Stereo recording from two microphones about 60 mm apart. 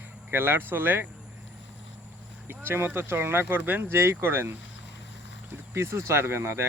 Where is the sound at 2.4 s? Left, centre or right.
Right.